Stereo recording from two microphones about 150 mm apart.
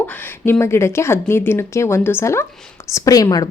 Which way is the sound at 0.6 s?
20° left (ahead or behind).